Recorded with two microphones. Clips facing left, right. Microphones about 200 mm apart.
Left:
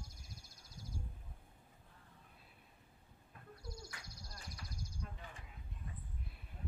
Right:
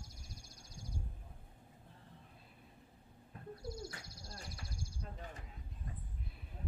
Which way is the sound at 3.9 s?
35° right (ahead or behind).